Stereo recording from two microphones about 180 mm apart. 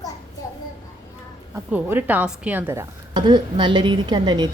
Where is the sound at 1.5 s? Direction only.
10° right (ahead or behind).